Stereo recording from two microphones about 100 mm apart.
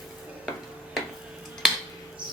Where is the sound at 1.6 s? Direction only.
5° right (ahead or behind).